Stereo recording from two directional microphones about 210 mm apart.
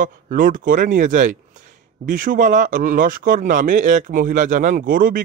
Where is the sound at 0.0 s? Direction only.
40° right (ahead or behind).